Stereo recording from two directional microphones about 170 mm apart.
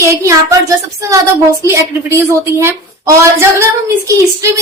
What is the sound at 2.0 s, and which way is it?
A woman's voice, 15° right (ahead or behind).